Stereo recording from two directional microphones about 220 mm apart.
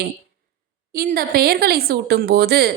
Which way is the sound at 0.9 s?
40° right (ahead or behind).